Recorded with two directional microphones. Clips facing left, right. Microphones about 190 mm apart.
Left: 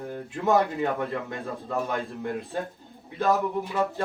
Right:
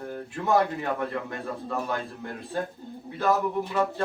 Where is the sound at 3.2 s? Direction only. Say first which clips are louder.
Left 1 dB; 15° left (ahead or behind).